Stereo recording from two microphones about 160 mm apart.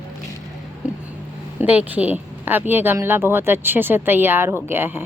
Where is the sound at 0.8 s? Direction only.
5° right (ahead or behind).